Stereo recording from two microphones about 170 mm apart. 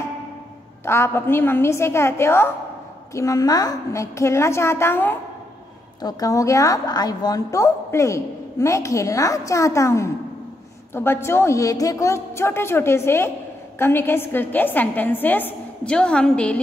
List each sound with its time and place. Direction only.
0.8 s a woman's voice: 15° left (ahead or behind)